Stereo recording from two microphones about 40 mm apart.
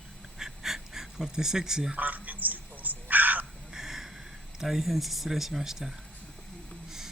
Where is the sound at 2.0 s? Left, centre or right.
Right.